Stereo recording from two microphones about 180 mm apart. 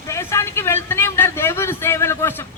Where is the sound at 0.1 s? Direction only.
15° left (ahead or behind).